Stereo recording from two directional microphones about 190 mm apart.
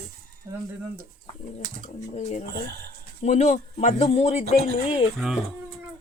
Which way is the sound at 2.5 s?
55° right (ahead or behind).